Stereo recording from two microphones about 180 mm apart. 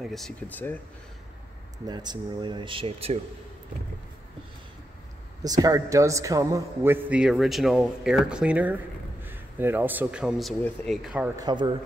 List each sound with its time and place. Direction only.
0.0 s speech: centre (ahead or behind)
1.9 s speech: 25° right (ahead or behind)
5.4 s a man's voice: 20° right (ahead or behind)
11.3 s speech: 25° right (ahead or behind)